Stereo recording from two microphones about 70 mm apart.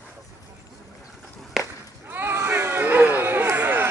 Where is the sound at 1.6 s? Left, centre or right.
Centre.